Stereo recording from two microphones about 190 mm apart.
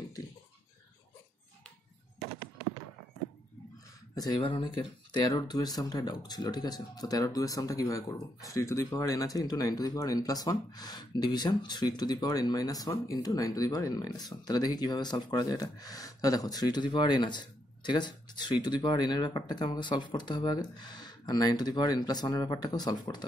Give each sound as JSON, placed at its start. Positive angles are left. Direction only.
{"t": 4.1, "sound": "speech", "side_deg": 20}